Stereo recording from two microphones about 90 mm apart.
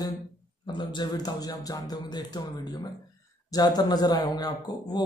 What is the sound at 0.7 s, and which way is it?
A man's voice, 55° left (ahead or behind).